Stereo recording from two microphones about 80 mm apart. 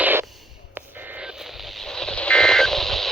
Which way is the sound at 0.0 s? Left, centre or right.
Right.